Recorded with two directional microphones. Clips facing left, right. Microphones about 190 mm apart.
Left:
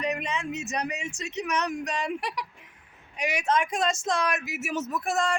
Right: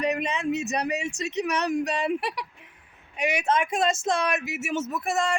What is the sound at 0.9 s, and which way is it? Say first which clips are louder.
Speech: right 6 dB; 65° right (ahead or behind).